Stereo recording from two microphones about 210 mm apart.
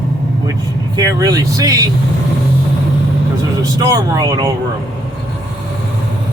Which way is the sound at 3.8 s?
15° right (ahead or behind).